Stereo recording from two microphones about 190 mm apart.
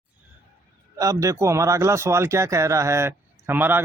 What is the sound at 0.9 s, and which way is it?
Speech, 20° right (ahead or behind).